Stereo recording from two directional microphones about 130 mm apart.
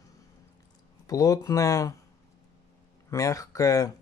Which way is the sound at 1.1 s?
25° left (ahead or behind).